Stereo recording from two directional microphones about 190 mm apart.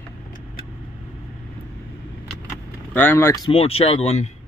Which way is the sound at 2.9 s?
10° left (ahead or behind).